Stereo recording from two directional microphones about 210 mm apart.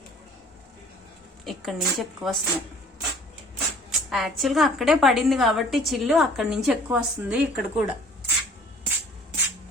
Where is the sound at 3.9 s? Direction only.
Centre (ahead or behind).